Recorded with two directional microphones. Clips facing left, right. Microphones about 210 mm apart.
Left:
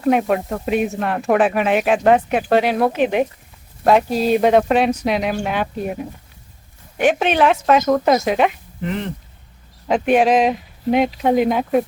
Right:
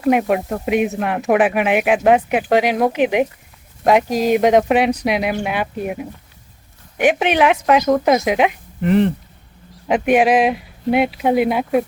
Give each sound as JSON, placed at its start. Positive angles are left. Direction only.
{"t": 0.0, "sound": "speech", "side_deg": -5}
{"t": 9.9, "sound": "speech", "side_deg": -10}